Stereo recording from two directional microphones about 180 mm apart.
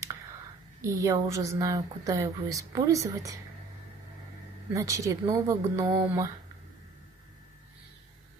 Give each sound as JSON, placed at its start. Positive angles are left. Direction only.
{"t": 0.8, "sound": "a woman's voice", "side_deg": -20}
{"t": 4.7, "sound": "a woman's voice", "side_deg": -20}